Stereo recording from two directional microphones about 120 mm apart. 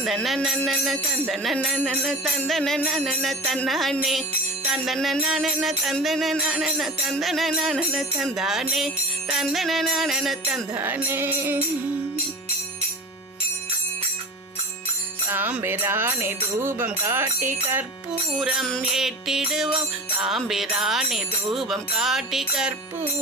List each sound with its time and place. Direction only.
0.0 s music: centre (ahead or behind)
10.8 s music: 15° right (ahead or behind)
15.3 s music: 15° right (ahead or behind)
18.3 s music: centre (ahead or behind)